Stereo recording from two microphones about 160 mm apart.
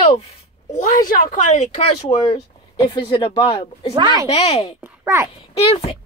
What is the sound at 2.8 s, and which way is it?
Speech, 25° left (ahead or behind).